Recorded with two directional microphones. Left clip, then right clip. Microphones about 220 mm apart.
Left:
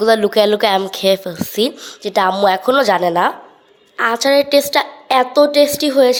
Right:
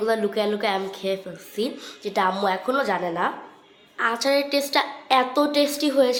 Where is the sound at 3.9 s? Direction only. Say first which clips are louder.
Left 8 dB; 30° left (ahead or behind).